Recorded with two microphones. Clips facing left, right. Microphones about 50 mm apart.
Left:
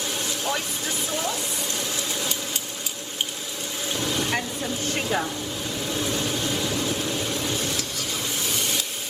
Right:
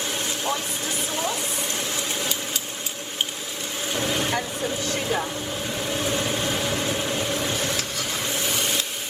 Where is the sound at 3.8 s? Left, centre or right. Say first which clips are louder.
Right 2 dB; right.